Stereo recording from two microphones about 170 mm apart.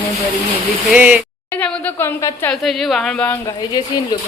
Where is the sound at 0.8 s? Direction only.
10° right (ahead or behind).